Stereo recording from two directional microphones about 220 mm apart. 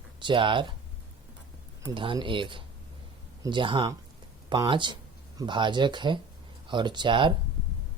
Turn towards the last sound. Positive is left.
turn(degrees=-20)  # may be behind; listen again after turning